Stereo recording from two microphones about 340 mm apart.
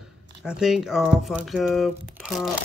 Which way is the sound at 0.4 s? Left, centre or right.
Centre.